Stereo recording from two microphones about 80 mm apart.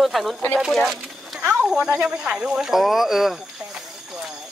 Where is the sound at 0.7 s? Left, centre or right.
Centre.